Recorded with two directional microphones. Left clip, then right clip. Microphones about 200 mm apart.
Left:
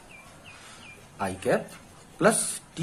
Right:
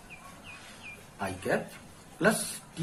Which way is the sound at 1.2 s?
40° left (ahead or behind).